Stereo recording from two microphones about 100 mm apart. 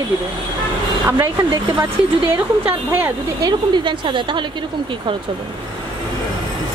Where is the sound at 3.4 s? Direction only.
50° right (ahead or behind).